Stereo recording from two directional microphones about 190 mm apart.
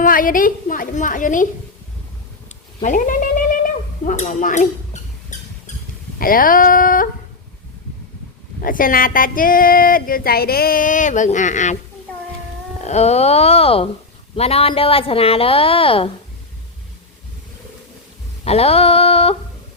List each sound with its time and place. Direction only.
0.0 s speech: 45° left (ahead or behind)
2.8 s cat: 45° left (ahead or behind)
4.0 s speech: 40° left (ahead or behind)
5.3 s rodents: 40° left (ahead or behind)
6.1 s speech: 50° left (ahead or behind)
8.6 s speech: 45° left (ahead or behind)
12.8 s a woman's voice: 35° left (ahead or behind)
18.4 s speech: 30° left (ahead or behind)